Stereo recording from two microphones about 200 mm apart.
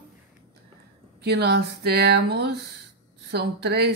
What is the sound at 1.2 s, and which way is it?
A woman's voice, 55° right (ahead or behind).